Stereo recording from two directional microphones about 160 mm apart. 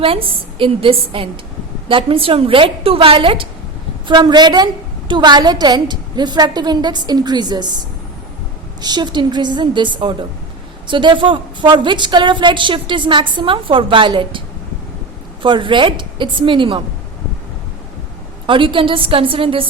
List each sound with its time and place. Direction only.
0.0 s a woman's voice: 35° right (ahead or behind)
8.8 s a woman's voice: 25° right (ahead or behind)
18.4 s a woman's voice: 30° right (ahead or behind)